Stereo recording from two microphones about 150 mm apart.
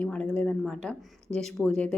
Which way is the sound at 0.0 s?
5° left (ahead or behind).